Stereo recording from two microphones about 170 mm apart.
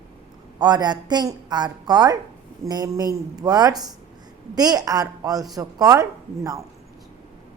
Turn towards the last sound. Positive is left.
turn(degrees=-20)  # may be behind; listen again after turning